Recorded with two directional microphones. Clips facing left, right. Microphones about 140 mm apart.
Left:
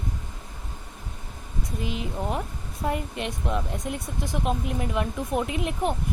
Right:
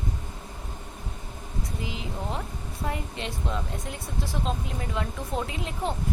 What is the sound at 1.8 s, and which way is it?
Speech, 20° right (ahead or behind).